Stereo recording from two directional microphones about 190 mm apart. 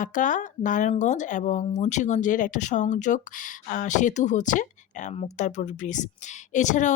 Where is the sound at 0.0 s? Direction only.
45° left (ahead or behind).